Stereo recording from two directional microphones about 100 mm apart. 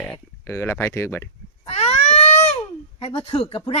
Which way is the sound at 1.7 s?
90° left.